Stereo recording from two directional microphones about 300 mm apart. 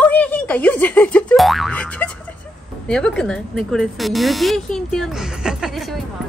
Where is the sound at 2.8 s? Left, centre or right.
Centre.